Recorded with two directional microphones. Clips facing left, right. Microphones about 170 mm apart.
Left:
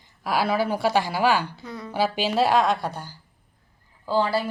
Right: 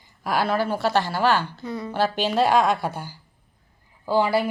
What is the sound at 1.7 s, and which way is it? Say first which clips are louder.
A woman's voice: right 2 dB; centre (ahead or behind).